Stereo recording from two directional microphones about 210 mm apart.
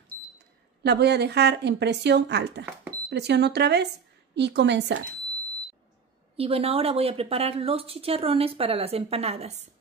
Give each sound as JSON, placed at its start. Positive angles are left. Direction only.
{"t": 0.8, "sound": "a woman's voice", "side_deg": -50}
{"t": 6.3, "sound": "speech", "side_deg": -30}